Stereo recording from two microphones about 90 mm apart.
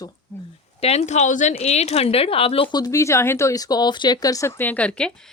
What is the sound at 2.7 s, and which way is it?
Speech, 45° left (ahead or behind).